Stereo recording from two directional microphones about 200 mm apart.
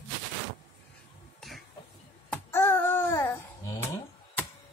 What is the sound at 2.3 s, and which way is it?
Babbling, 10° left (ahead or behind).